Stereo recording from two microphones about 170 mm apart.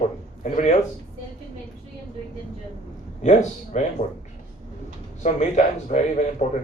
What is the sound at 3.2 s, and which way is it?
Speech, 45° left (ahead or behind).